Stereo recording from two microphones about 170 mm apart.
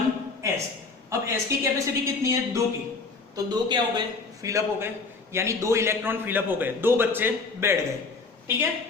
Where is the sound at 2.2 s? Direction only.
20° right (ahead or behind).